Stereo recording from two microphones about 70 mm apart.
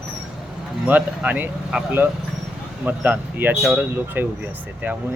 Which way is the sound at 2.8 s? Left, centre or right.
Right.